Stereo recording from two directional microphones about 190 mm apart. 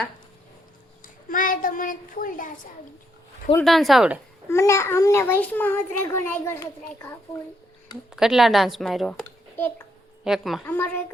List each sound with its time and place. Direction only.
1.0 s a sound: 45° left (ahead or behind)
3.6 s speech: centre (ahead or behind)
4.4 s a child's voice: 15° left (ahead or behind)
8.1 s a child's voice: centre (ahead or behind)
10.2 s speech: centre (ahead or behind)
10.8 s a child's voice: 10° left (ahead or behind)